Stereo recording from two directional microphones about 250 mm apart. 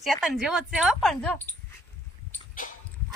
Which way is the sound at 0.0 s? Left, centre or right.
Centre.